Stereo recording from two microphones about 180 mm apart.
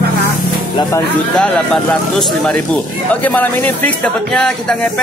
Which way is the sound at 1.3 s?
5° left (ahead or behind).